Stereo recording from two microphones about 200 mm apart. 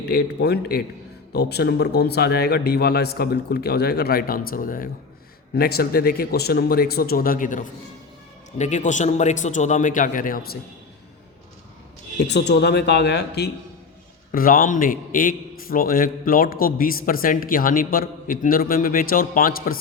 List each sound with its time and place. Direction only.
0.1 s a man's voice: 55° left (ahead or behind)
12.3 s speech: 55° left (ahead or behind)
14.3 s a man's voice: 45° left (ahead or behind)